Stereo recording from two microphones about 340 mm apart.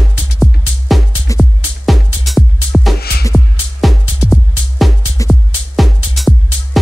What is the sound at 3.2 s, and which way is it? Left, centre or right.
Music, centre.